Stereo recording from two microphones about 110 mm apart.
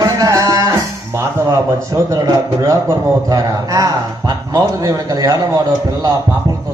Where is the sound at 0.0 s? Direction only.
30° right (ahead or behind).